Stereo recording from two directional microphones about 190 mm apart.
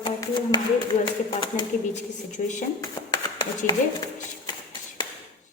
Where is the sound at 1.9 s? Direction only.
40° left (ahead or behind).